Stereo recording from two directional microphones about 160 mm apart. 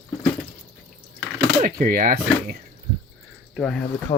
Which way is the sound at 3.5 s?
Centre (ahead or behind).